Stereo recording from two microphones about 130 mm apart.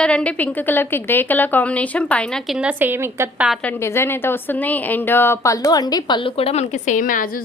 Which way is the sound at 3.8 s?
20° left (ahead or behind).